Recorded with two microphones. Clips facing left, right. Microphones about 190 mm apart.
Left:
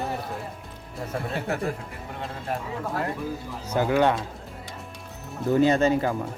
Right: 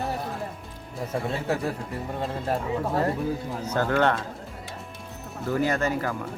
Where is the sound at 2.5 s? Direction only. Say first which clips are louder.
Right 2 dB; 35° right (ahead or behind).